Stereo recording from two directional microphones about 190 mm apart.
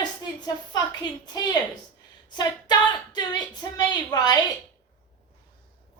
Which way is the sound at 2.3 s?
20° left (ahead or behind).